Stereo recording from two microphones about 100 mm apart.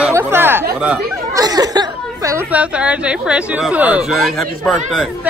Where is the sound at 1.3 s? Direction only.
40° right (ahead or behind).